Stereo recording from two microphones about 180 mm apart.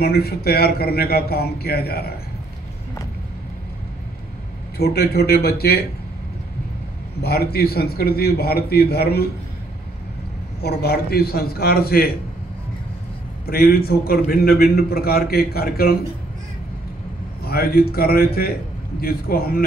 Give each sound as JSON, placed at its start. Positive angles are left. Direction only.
{"t": 0.0, "sound": "a man's voice", "side_deg": 60}
{"t": 4.7, "sound": "a man's voice", "side_deg": 60}
{"t": 7.2, "sound": "a man's voice", "side_deg": 60}
{"t": 10.6, "sound": "a man's voice", "side_deg": 60}
{"t": 13.5, "sound": "a man's voice", "side_deg": 55}
{"t": 17.4, "sound": "a man's voice", "side_deg": 60}